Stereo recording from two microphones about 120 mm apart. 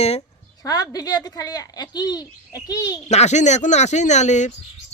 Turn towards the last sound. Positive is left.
turn(degrees=75)  # may be behind; listen again after turning